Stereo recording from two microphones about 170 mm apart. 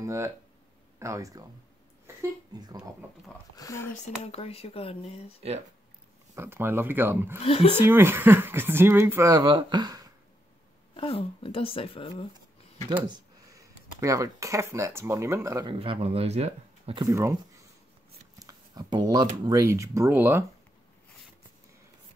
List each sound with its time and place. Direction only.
0.0 s speech: 15° right (ahead or behind)
2.5 s speech: 25° right (ahead or behind)
3.5 s speech: 20° left (ahead or behind)
4.0 s speech: 35° left (ahead or behind)
6.3 s speech: 15° right (ahead or behind)
7.4 s speech: 35° left (ahead or behind)
7.8 s speech: 15° right (ahead or behind)
11.0 s speech: 30° left (ahead or behind)
13.0 s speech: 20° right (ahead or behind)
15.7 s speech: 30° right (ahead or behind)
17.0 s speech: 15° right (ahead or behind)
18.4 s a sound: 20° right (ahead or behind)
19.4 s speech: 20° right (ahead or behind)